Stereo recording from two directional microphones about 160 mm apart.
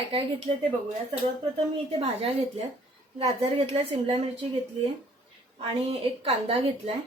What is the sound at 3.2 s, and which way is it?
Speech, 40° right (ahead or behind).